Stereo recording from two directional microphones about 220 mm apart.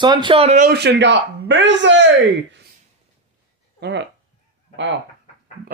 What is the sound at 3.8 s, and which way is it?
Speech, 50° right (ahead or behind).